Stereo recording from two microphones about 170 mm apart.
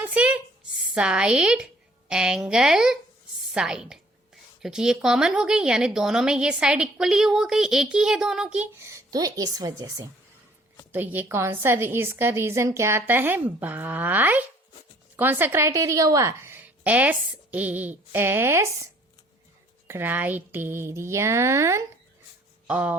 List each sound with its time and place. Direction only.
0.0 s a sound: 10° right (ahead or behind)
0.9 s a woman's voice: 5° right (ahead or behind)
8.8 s a woman's voice: 15° right (ahead or behind)
19.9 s a woman's voice: 10° right (ahead or behind)